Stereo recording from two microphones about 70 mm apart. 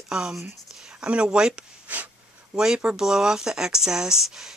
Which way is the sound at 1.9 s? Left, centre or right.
Right.